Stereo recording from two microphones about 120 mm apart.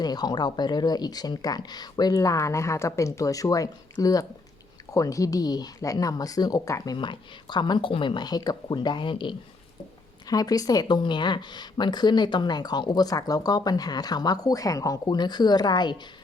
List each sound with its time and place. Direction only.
0.0 s a woman's voice: 35° left (ahead or behind)
6.9 s a woman's voice: 40° left (ahead or behind)
10.2 s a woman's voice: 30° left (ahead or behind)